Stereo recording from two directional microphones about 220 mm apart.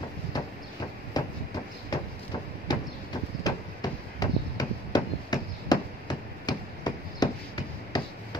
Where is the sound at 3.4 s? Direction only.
20° left (ahead or behind).